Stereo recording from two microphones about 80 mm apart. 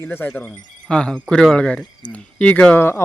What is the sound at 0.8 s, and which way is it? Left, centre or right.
A man's voice, centre.